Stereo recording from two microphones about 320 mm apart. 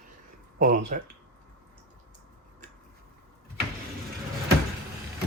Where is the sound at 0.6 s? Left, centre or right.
Right.